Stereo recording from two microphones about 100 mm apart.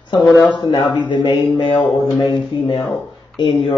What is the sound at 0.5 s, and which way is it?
Speech, 50° left (ahead or behind).